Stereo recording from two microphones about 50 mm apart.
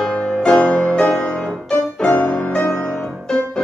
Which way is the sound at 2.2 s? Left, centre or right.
Left.